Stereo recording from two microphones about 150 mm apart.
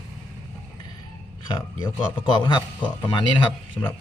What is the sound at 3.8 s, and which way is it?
Speech, 10° left (ahead or behind).